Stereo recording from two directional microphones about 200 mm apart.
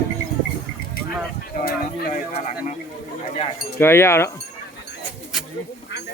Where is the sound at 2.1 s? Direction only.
35° left (ahead or behind).